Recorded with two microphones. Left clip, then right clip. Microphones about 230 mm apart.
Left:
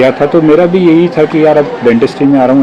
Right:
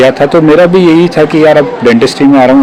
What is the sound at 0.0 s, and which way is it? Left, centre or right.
A man's voice, right.